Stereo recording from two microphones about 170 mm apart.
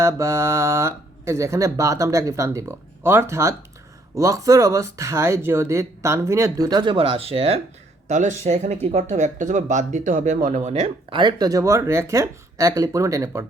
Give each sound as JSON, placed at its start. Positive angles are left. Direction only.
{"t": 0.0, "sound": "speech", "side_deg": -15}